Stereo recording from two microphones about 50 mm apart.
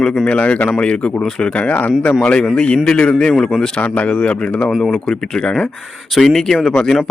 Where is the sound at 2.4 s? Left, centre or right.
Centre.